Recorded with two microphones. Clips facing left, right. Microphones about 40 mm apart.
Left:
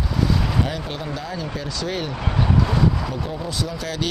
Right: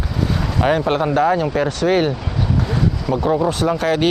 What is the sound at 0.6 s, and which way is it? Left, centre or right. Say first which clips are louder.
Speech: right 10 dB; right.